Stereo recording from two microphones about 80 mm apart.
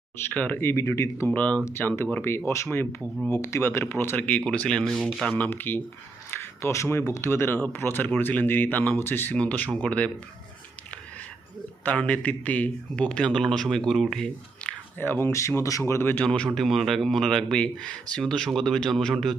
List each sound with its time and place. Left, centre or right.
0.3 s speech: centre
0.6 s speech: left
1.3 s a man's voice: centre
9.4 s a man's voice: centre
11.9 s a man's voice: centre
14.6 s a sound: centre
14.9 s speech: left
15.3 s speech: left
16.2 s a man's voice: centre
16.6 s speech: centre